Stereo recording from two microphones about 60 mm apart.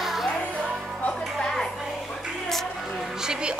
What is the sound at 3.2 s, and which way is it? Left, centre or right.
Speech, centre.